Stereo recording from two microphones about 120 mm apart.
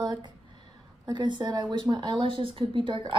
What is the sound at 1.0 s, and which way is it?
Speech, 40° right (ahead or behind).